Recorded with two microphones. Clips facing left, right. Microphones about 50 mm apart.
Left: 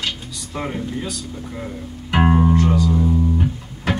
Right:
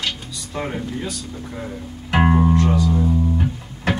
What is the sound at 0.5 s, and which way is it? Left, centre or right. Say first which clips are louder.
Speech: even; centre.